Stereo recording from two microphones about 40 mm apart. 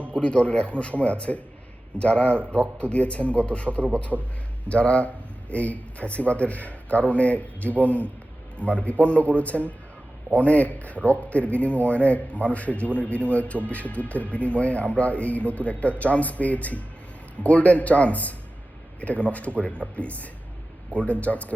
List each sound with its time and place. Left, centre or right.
0.1 s a man's voice: left
4.1 s a man's voice: right
4.7 s a man's voice: left